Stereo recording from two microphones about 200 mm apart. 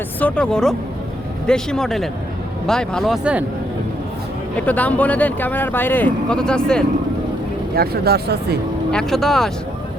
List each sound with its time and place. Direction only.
0.2 s speech: 5° left (ahead or behind)
4.6 s speech: 5° left (ahead or behind)
7.8 s speech: 55° right (ahead or behind)
8.9 s speech: 5° left (ahead or behind)